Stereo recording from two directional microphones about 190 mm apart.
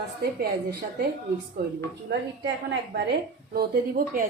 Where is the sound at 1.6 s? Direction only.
55° right (ahead or behind).